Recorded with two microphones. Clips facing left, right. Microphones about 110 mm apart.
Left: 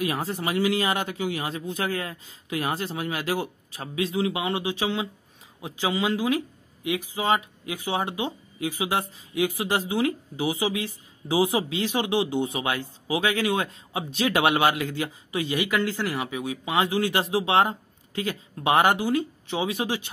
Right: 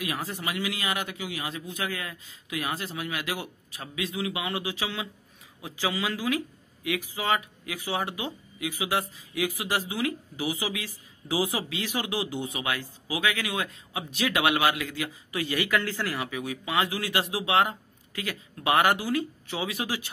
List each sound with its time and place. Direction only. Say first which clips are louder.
0.0 s speech: left 5 dB; 30° left (ahead or behind)